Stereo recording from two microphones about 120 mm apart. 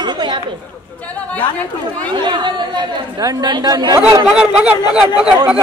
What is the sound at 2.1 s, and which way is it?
Speech, 40° right (ahead or behind).